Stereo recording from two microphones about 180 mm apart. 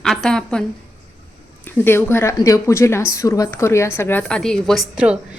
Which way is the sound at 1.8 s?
15° left (ahead or behind).